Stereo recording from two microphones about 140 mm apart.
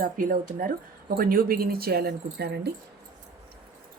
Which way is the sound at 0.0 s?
80° right.